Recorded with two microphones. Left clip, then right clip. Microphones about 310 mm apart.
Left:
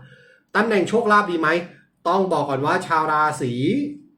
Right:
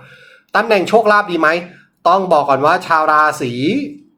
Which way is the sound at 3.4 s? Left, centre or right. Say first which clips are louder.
Right 5 dB; right.